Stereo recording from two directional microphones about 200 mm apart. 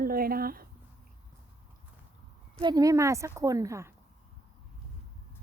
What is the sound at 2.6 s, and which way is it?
A woman's voice, 20° right (ahead or behind).